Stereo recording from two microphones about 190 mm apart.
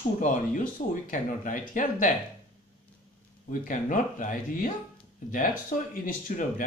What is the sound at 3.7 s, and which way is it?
Speech, 45° left (ahead or behind).